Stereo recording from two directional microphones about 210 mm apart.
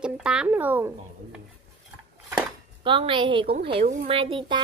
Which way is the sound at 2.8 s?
25° right (ahead or behind).